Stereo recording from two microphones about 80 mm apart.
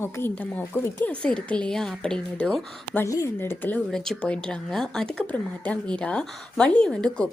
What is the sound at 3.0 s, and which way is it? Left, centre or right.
Speech, left.